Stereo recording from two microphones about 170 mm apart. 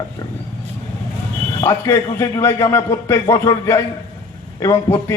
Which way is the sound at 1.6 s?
20° left (ahead or behind).